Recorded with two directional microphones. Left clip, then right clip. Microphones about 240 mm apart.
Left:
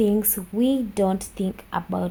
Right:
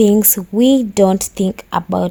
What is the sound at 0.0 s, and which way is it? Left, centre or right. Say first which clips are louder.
Speech: right 10 dB; right.